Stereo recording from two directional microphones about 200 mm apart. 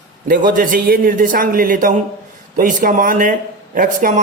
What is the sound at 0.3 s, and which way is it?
A man's voice, 40° right (ahead or behind).